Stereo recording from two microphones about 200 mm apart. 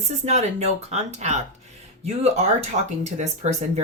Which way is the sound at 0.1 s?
35° right (ahead or behind).